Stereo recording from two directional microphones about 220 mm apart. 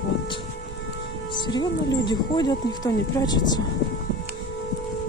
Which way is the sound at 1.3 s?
20° left (ahead or behind).